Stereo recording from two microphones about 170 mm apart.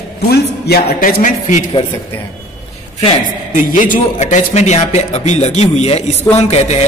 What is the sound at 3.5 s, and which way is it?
A man's voice, 50° left (ahead or behind).